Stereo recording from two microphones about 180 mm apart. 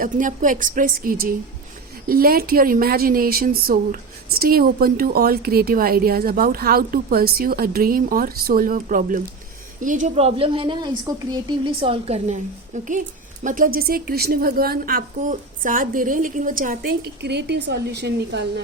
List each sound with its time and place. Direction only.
0.0 s a woman's voice: 45° right (ahead or behind)
17.2 s a woman's voice: 70° right (ahead or behind)